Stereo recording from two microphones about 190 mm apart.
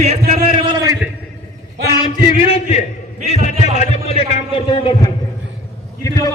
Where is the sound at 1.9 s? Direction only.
25° left (ahead or behind).